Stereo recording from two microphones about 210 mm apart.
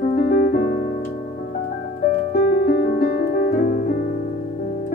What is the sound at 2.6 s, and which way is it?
Music, 45° left (ahead or behind).